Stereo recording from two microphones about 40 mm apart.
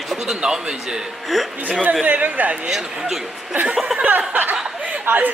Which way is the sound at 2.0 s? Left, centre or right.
Right.